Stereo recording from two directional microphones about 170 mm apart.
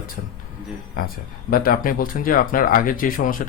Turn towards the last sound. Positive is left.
turn(degrees=55)  # may be behind; listen again after turning